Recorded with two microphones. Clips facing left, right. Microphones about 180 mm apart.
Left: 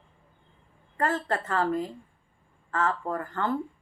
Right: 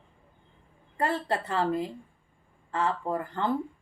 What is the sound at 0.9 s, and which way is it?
Female singing, 15° right (ahead or behind).